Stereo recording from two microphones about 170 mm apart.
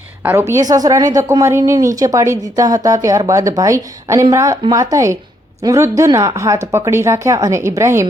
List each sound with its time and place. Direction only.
0.2 s a woman's voice: 15° right (ahead or behind)